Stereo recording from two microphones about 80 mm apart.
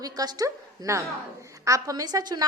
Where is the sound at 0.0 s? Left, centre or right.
Right.